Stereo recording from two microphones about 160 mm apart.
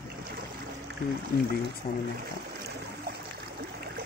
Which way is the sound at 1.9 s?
30° left (ahead or behind).